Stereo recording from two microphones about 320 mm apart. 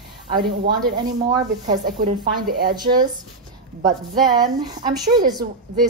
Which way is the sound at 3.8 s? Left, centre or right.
Right.